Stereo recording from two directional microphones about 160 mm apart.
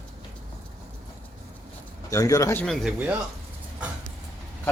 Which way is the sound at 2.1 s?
20° left (ahead or behind).